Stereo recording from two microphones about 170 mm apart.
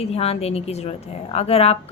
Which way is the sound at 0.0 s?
35° left (ahead or behind).